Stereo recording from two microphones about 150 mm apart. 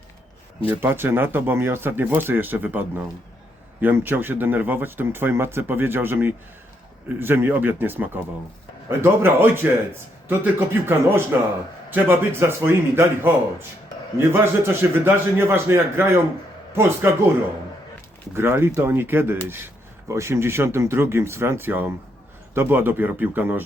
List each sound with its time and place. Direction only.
0.7 s speech: 15° right (ahead or behind)
18.3 s speech: 15° right (ahead or behind)